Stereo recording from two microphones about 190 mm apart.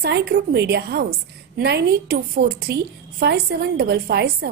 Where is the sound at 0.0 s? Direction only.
60° right (ahead or behind).